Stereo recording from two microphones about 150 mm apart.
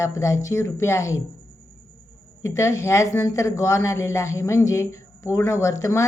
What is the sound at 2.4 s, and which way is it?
Speech, 20° left (ahead or behind).